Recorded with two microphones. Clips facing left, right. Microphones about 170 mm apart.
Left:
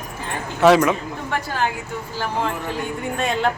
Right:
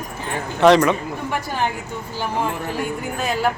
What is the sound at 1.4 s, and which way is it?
Speech, 15° right (ahead or behind).